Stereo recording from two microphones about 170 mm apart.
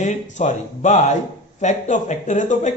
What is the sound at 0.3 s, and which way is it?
Speech, 45° left (ahead or behind).